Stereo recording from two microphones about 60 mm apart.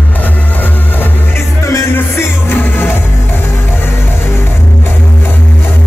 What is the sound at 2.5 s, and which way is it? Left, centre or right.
Music, left.